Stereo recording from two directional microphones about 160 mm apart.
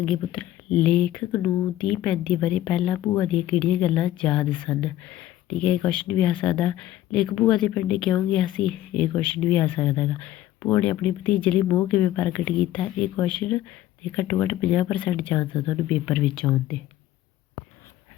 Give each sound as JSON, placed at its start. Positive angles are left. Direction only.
{"t": 0.0, "sound": "speech", "side_deg": 5}